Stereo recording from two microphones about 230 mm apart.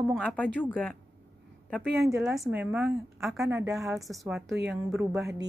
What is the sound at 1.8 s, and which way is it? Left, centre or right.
Speech, right.